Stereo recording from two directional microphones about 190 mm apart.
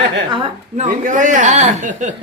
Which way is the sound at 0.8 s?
45° right (ahead or behind).